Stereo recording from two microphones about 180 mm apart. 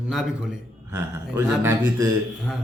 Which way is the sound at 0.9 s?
15° right (ahead or behind).